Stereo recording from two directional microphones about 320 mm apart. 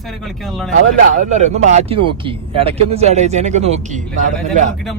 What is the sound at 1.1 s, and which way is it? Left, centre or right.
Speech, right.